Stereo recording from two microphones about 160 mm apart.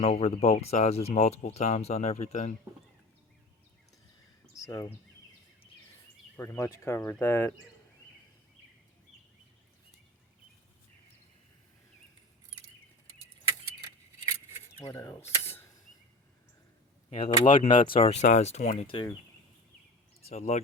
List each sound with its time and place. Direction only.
0.0 s speech: 45° left (ahead or behind)
4.5 s a sound: 20° left (ahead or behind)
6.3 s speech: 15° left (ahead or behind)
14.9 s speech: 20° left (ahead or behind)
15.2 s a sound: 40° left (ahead or behind)
17.1 s speech: 35° left (ahead or behind)
17.4 s speech: 55° left (ahead or behind)
18.0 s speech: 45° left (ahead or behind)
20.5 s speech: 45° left (ahead or behind)